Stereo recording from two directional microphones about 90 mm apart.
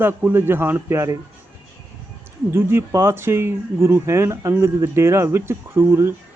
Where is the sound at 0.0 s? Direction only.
25° right (ahead or behind).